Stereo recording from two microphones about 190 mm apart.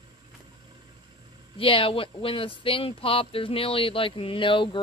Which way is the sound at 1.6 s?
30° left (ahead or behind).